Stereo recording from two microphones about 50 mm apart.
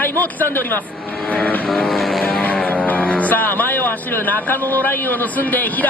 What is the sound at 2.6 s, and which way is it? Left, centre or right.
Music, left.